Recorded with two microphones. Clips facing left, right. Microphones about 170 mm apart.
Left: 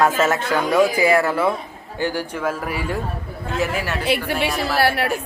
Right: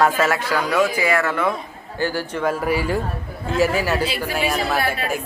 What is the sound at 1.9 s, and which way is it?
A man's voice, 15° left (ahead or behind).